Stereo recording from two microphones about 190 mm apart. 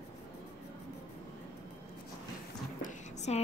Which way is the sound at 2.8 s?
40° left (ahead or behind).